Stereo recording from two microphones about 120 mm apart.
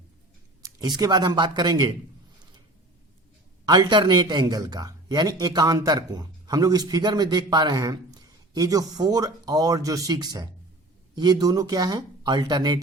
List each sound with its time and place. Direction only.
0.6 s a man's voice: 35° right (ahead or behind)
3.7 s a man's voice: 35° right (ahead or behind)